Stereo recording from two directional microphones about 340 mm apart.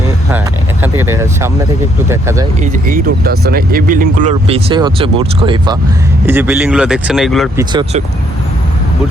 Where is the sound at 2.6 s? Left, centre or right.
Right; by 7.7 s centre.